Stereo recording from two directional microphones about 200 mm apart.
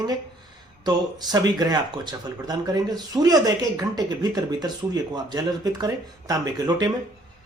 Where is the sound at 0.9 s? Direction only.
20° right (ahead or behind).